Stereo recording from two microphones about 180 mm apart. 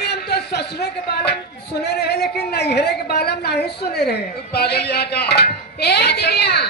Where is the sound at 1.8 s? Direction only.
65° left (ahead or behind).